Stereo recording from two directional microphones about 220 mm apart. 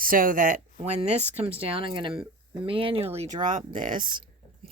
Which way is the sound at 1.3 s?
25° right (ahead or behind).